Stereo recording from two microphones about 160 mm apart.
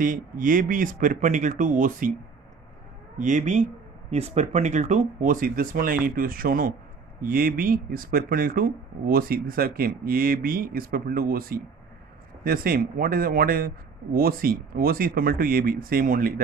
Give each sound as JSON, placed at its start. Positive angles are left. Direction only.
{"t": 0.0, "sound": "speech", "side_deg": -55}
{"t": 3.2, "sound": "speech", "side_deg": -50}